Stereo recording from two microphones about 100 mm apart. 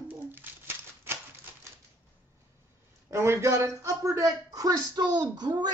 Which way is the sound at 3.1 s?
25° right (ahead or behind).